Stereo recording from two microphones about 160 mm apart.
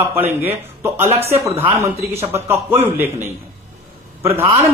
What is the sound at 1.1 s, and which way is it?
Speech, 40° right (ahead or behind).